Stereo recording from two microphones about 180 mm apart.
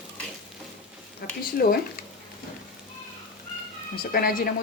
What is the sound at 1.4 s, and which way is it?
Speech, 55° left (ahead or behind).